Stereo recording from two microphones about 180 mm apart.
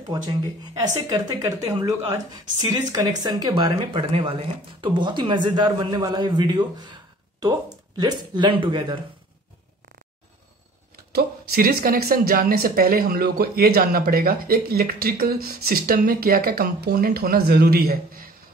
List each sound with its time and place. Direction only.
0.7 s speech: 20° right (ahead or behind)
11.1 s speech: 55° right (ahead or behind)